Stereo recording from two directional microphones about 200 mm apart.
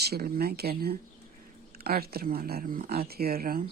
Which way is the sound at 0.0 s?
50° right (ahead or behind).